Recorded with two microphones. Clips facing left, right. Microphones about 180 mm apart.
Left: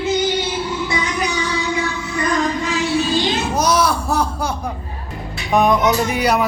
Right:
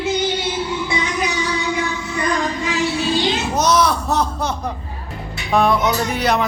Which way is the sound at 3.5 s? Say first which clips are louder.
Right 1 dB; 10° left (ahead or behind).